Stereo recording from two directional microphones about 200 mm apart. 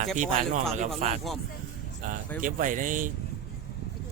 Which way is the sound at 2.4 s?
40° right (ahead or behind).